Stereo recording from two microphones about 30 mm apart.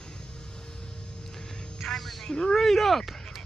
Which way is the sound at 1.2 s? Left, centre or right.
Centre.